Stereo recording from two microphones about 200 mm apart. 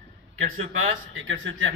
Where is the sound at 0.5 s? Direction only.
80° right.